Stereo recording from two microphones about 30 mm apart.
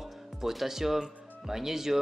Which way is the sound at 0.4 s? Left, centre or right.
Centre.